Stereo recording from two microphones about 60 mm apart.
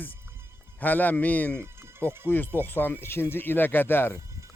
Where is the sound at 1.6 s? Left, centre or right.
Right.